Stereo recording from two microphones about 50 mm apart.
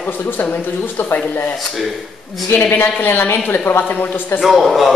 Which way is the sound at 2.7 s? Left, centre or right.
Left.